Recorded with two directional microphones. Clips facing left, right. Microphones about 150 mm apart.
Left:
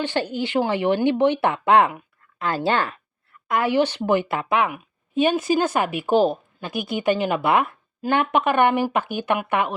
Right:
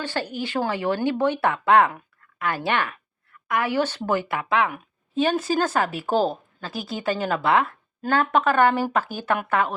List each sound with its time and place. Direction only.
0.0 s a woman's voice: 25° left (ahead or behind)